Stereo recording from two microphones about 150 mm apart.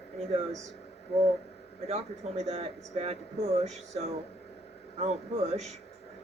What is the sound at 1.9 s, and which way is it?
Speech, 45° right (ahead or behind).